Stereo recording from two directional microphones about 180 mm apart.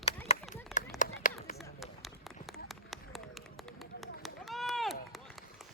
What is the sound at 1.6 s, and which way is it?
Run, centre (ahead or behind).